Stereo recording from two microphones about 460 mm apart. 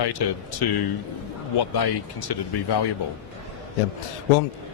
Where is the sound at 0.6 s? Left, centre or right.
Left.